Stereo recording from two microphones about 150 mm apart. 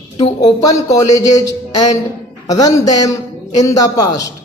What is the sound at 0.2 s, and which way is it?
A man's voice, 25° left (ahead or behind).